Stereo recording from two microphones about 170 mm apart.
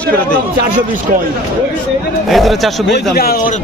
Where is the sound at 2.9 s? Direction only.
65° left (ahead or behind).